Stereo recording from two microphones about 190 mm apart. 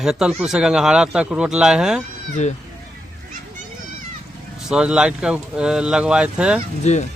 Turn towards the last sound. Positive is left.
turn(degrees=35)  # may be behind; listen again after turning